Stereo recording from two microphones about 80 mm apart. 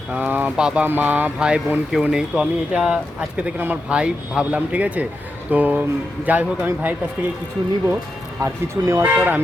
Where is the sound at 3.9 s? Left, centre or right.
Centre.